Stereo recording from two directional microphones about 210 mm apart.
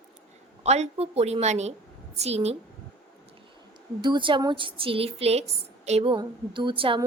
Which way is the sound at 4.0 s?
20° right (ahead or behind).